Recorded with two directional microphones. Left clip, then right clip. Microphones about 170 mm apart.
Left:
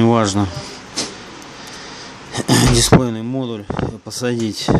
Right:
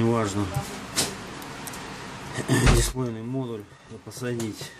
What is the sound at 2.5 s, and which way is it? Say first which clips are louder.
Speech: left 8 dB; 55° left (ahead or behind).